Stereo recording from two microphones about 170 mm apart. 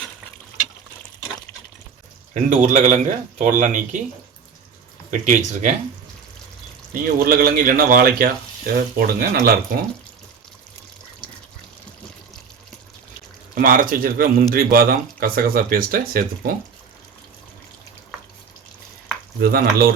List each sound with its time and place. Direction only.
2.3 s speech: 45° right (ahead or behind)
5.2 s speech: 45° right (ahead or behind)
6.9 s speech: 60° right (ahead or behind)
13.6 s speech: 55° right (ahead or behind)
19.4 s speech: 60° right (ahead or behind)